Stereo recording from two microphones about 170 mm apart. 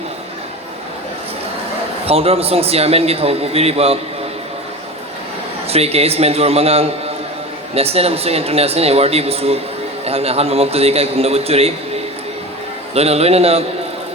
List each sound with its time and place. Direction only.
2.0 s a man's voice: 35° right (ahead or behind)
5.6 s a man's voice: 35° right (ahead or behind)
12.9 s a man's voice: 35° right (ahead or behind)